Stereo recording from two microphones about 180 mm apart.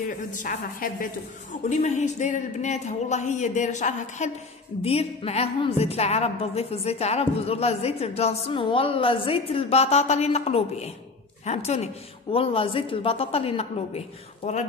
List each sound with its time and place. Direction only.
0.3 s a woman's voice: 45° left (ahead or behind)